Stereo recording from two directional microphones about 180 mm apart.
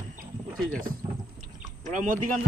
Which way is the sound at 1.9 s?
45° right (ahead or behind).